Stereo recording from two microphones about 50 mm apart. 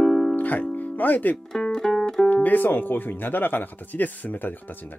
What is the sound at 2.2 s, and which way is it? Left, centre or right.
Speech, left.